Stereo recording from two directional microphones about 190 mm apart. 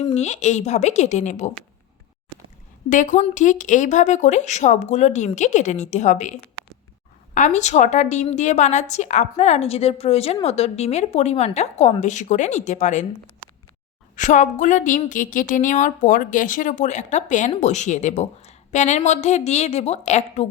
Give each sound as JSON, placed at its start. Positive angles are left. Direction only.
{"t": 0.1, "sound": "a woman's voice", "side_deg": 35}
{"t": 2.9, "sound": "a woman's voice", "side_deg": 40}
{"t": 7.3, "sound": "a woman's voice", "side_deg": 40}
{"t": 14.2, "sound": "a woman's voice", "side_deg": 40}